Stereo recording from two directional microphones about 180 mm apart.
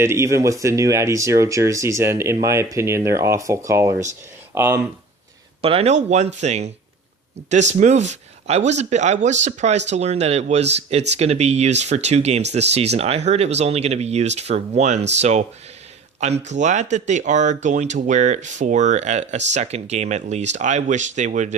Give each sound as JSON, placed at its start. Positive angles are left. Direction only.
{"t": 0.0, "sound": "speech", "side_deg": -15}
{"t": 5.6, "sound": "speech", "side_deg": -35}
{"t": 16.5, "sound": "speech", "side_deg": -40}